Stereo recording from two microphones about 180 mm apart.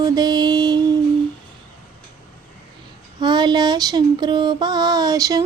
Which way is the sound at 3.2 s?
25° right (ahead or behind).